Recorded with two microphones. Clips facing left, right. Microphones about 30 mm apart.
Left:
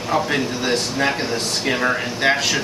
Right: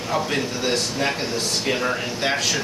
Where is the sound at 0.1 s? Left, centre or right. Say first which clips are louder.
Left 4 dB; centre.